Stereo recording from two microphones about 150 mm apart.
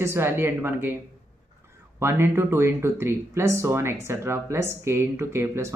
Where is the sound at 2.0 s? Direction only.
15° right (ahead or behind).